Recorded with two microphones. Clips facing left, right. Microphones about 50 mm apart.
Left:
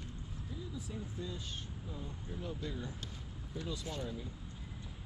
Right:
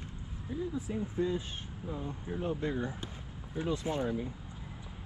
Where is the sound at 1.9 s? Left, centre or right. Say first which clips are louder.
Right 10 dB; right.